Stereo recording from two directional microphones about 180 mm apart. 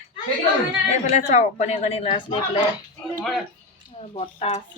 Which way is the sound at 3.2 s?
Centre (ahead or behind).